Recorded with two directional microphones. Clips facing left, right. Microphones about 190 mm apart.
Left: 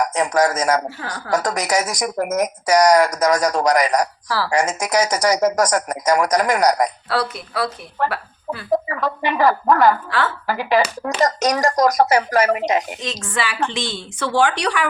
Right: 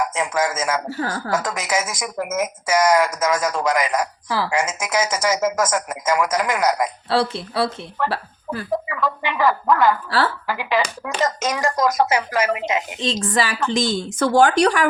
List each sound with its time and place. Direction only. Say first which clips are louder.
0.0 s a man's voice: left 4 dB; 40° left (ahead or behind)
0.9 s a woman's voice: right 4 dB; 40° right (ahead or behind)
1.3 s speech: left 6 dB; 40° left (ahead or behind)
7.1 s speech: right 2 dB; 25° right (ahead or behind)
8.9 s speech: left 2 dB; 40° left (ahead or behind)
13.0 s a woman's voice: right 4 dB; 30° right (ahead or behind)